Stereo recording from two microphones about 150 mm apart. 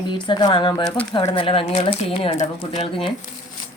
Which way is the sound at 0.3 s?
30° left (ahead or behind).